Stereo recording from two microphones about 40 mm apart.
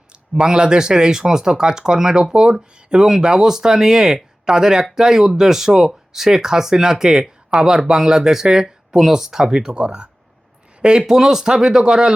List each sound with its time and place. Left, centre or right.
0.1 s speech: right